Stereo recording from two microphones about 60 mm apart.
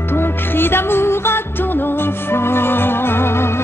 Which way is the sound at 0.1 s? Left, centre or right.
Left.